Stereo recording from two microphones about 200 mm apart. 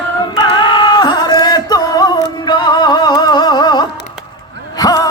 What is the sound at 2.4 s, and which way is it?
Music, 20° left (ahead or behind).